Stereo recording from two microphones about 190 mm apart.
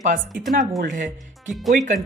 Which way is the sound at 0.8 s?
45° right (ahead or behind).